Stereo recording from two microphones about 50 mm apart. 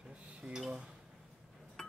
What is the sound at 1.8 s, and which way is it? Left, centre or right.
Chink, centre.